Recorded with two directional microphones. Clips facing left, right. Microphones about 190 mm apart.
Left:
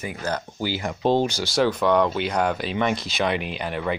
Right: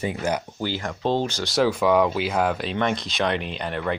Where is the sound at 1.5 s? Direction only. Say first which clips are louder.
Right 2 dB; 5° right (ahead or behind).